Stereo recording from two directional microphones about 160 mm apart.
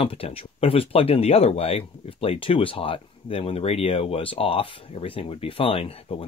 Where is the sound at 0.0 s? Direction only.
35° left (ahead or behind).